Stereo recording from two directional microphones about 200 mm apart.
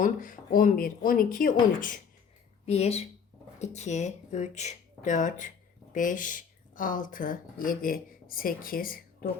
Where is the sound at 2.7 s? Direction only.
30° left (ahead or behind).